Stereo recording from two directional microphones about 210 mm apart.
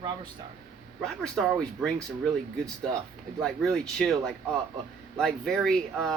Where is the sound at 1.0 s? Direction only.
Centre (ahead or behind).